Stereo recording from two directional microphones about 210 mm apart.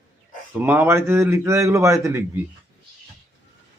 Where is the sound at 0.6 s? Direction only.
10° right (ahead or behind).